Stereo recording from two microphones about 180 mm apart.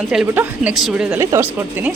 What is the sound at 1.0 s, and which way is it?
Speech, 15° right (ahead or behind).